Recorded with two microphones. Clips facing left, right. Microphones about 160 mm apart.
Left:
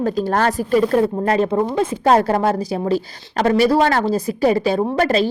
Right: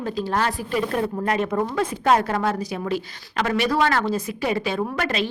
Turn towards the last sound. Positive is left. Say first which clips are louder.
# left 8 dB
turn(degrees=35)  # may be behind; listen again after turning